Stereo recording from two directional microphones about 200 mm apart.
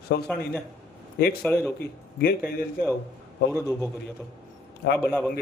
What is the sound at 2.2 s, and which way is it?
Speech, 50° left (ahead or behind).